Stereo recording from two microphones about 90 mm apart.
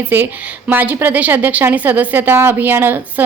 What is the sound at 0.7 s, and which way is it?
Speech, 20° right (ahead or behind).